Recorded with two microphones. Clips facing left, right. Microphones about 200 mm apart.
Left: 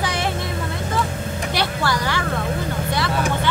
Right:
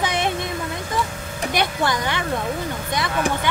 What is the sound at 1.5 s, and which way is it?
Speech, 20° right (ahead or behind).